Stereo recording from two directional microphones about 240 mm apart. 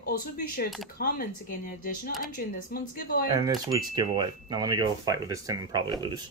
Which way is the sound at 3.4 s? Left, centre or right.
Centre.